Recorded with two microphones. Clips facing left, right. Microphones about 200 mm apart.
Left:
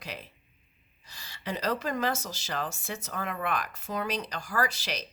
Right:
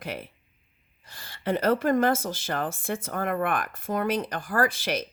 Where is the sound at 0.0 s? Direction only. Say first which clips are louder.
Right 6 dB; 55° right (ahead or behind).